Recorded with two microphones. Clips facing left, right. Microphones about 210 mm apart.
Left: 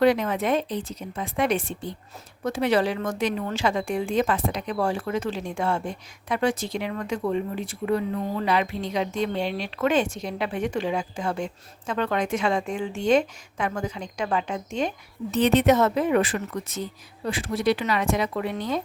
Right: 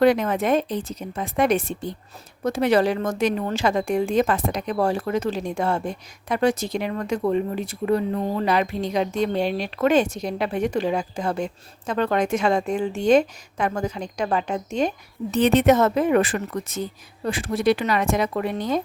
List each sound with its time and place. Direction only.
0.0 s a woman's voice: 50° right (ahead or behind)